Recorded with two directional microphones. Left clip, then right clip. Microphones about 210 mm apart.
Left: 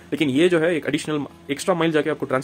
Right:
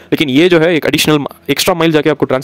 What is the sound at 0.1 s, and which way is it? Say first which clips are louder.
Speech: right 9 dB; 45° right (ahead or behind).